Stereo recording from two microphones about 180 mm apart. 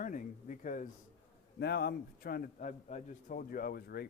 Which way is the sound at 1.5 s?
65° left (ahead or behind).